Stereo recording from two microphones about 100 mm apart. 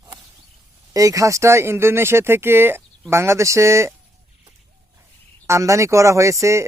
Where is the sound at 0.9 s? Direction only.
35° right (ahead or behind).